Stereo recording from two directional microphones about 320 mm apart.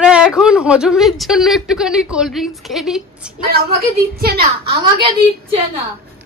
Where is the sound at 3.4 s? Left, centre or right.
Right.